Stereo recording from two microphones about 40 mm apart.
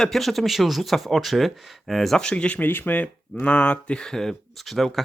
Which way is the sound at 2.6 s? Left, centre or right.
Left.